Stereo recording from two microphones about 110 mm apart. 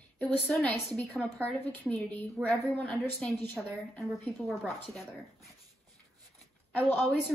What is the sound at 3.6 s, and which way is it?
Speech, centre (ahead or behind).